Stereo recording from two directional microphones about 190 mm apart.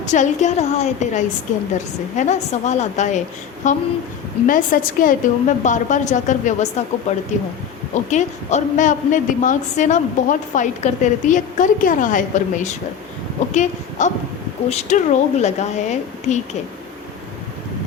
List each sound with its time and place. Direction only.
0.0 s a woman's voice: 40° left (ahead or behind)